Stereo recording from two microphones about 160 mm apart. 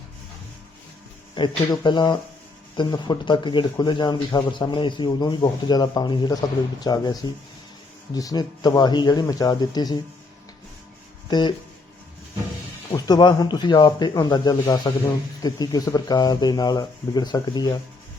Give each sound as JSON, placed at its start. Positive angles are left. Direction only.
{"t": 1.4, "sound": "speech", "side_deg": 30}
{"t": 11.3, "sound": "speech", "side_deg": 25}
{"t": 12.9, "sound": "speech", "side_deg": 25}